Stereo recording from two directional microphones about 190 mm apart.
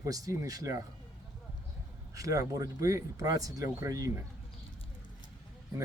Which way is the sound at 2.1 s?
15° right (ahead or behind).